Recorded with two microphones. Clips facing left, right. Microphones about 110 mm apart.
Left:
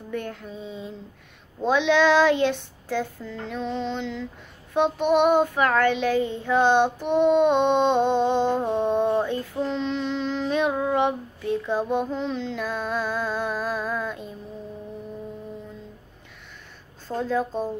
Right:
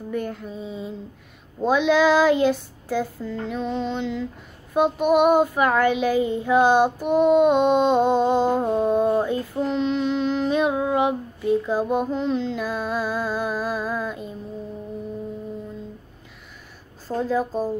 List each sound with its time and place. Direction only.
0.1 s child singing: 5° right (ahead or behind)
17.1 s child singing: 10° right (ahead or behind)